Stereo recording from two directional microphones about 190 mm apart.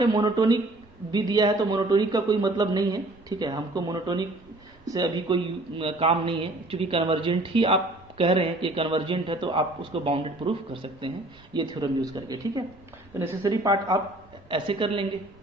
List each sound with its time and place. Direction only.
0.0 s a man's voice: 20° right (ahead or behind)